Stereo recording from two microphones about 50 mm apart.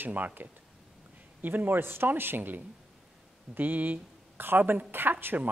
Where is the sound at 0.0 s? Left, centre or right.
Right.